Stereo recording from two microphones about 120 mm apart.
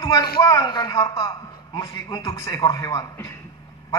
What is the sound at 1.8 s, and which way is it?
A man's voice, 35° left (ahead or behind).